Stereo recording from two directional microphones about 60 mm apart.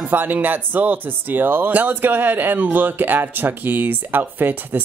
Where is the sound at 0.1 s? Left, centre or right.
Right.